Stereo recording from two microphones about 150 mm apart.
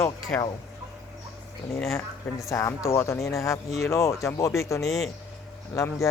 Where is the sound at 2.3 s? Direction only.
20° left (ahead or behind).